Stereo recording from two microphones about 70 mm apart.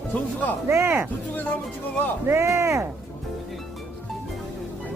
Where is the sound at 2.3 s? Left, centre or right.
Right.